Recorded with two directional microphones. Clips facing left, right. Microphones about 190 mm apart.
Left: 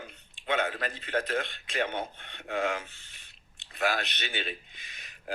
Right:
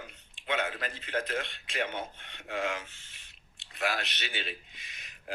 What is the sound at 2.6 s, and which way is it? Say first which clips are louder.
A man's voice: left 3 dB; 35° left (ahead or behind).